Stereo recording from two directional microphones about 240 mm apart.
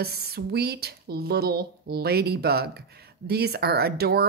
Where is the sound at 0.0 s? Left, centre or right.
Right.